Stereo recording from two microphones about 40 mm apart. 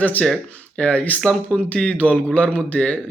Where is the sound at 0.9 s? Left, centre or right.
Left.